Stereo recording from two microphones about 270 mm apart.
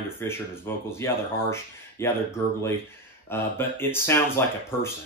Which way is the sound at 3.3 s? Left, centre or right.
Centre.